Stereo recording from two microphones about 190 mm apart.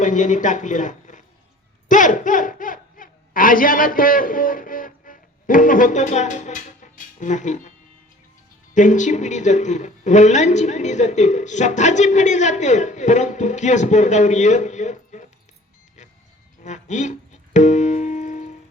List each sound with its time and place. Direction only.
0.0 s speech: 40° left (ahead or behind)
8.7 s a woman's voice: 40° left (ahead or behind)
16.0 s vehicle: 40° left (ahead or behind)
16.6 s music: 40° left (ahead or behind)